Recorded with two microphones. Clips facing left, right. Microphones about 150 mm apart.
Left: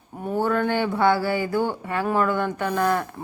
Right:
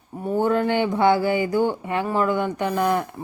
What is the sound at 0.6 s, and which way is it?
Speech, 15° right (ahead or behind).